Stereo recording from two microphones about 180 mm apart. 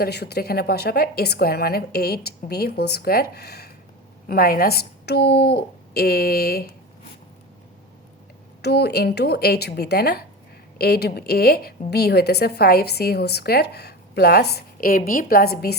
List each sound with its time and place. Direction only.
0.0 s a woman's voice: 65° left (ahead or behind)
8.6 s a woman's voice: 60° left (ahead or behind)